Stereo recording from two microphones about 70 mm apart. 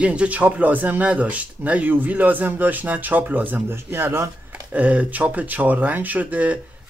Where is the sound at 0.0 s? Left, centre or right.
Centre; by 4.3 s right.